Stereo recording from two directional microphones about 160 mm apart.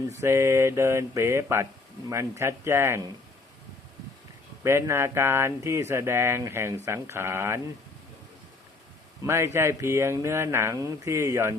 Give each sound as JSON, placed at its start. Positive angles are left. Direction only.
{"t": 0.1, "sound": "speech", "side_deg": -15}
{"t": 4.6, "sound": "speech", "side_deg": -15}
{"t": 9.2, "sound": "speech", "side_deg": -15}